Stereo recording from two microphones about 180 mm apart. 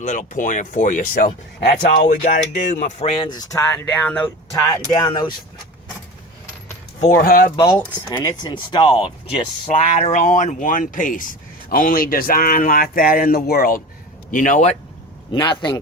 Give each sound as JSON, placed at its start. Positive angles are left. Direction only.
{"t": 0.0, "sound": "speech", "side_deg": 45}
{"t": 4.5, "sound": "speech", "side_deg": 20}
{"t": 7.0, "sound": "speech", "side_deg": 50}
{"t": 7.5, "sound": "speech", "side_deg": 20}
{"t": 15.3, "sound": "speech", "side_deg": 20}